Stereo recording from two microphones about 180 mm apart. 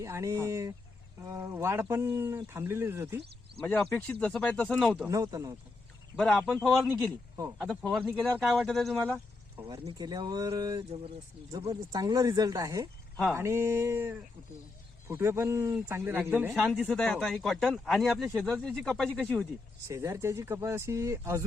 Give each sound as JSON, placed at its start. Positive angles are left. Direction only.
{"t": 0.0, "sound": "speech", "side_deg": -15}
{"t": 3.8, "sound": "speech", "side_deg": 5}
{"t": 5.0, "sound": "speech", "side_deg": -20}
{"t": 6.1, "sound": "speech", "side_deg": 5}
{"t": 7.6, "sound": "speech", "side_deg": 0}
{"t": 10.0, "sound": "speech", "side_deg": -20}
{"t": 15.2, "sound": "speech", "side_deg": -15}
{"t": 16.7, "sound": "speech", "side_deg": 0}
{"t": 19.9, "sound": "speech", "side_deg": -15}